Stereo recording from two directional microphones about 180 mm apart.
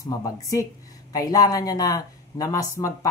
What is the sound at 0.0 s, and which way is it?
Speech, 20° left (ahead or behind).